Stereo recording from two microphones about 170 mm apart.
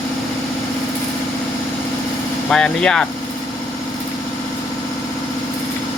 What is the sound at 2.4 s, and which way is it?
Speech, 5° left (ahead or behind).